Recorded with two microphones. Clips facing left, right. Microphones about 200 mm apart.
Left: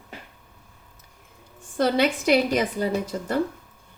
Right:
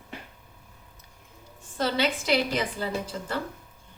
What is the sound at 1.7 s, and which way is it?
Speech, 50° left (ahead or behind).